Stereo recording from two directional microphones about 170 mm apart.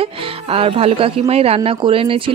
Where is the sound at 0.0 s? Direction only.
35° right (ahead or behind).